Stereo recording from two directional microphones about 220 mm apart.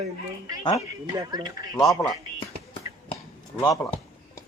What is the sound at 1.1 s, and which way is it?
Speech, 20° right (ahead or behind).